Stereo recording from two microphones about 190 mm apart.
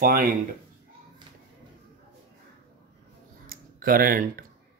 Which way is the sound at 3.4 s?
50° right (ahead or behind).